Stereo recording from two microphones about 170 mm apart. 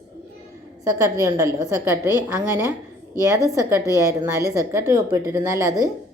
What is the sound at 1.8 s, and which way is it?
Speech, 15° right (ahead or behind).